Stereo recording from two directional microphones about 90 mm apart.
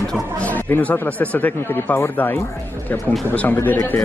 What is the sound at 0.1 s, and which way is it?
Speech, 15° left (ahead or behind).